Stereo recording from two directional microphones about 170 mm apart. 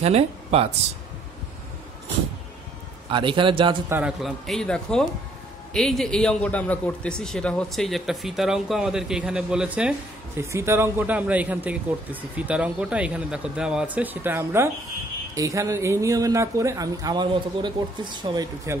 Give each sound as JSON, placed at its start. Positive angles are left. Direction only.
{"t": 0.0, "sound": "speech", "side_deg": -40}
{"t": 3.1, "sound": "speech", "side_deg": -30}
{"t": 3.9, "sound": "a man's voice", "side_deg": -5}